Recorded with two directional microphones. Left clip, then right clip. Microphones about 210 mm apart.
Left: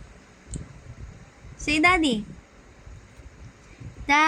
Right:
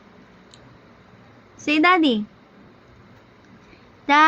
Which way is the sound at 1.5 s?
15° left (ahead or behind).